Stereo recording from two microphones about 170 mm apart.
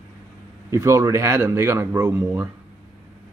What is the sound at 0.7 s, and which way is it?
Speech, 15° right (ahead or behind).